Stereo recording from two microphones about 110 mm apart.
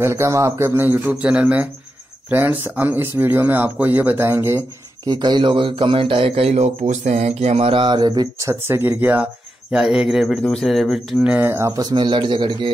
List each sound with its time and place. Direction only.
0.0 s a man's voice: 25° right (ahead or behind)
1.0 s speech: 10° right (ahead or behind)
5.0 s speech: 40° right (ahead or behind)
8.5 s speech: 25° right (ahead or behind); by 11.3 s centre (ahead or behind)
11.3 s a man's voice: 20° right (ahead or behind)
11.9 s speech: 45° right (ahead or behind)